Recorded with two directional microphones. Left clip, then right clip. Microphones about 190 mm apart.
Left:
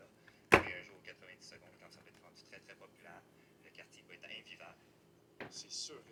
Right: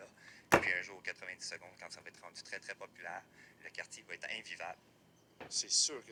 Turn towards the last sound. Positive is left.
turn(degrees=-40)  # may be behind; listen again after turning